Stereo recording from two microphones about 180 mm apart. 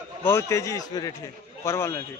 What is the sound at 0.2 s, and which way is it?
A man's voice, 15° left (ahead or behind).